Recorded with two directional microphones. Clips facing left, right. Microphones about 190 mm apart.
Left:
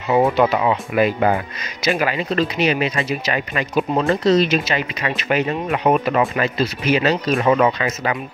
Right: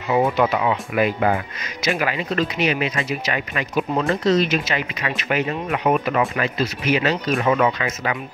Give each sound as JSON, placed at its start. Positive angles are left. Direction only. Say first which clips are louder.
{"t": 0.1, "sound": "speech", "louder": "left 3 dB", "side_deg": 30}